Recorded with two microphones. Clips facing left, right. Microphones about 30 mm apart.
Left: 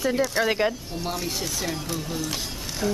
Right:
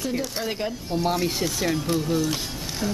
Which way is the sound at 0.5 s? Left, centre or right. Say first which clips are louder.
Left 5 dB; left.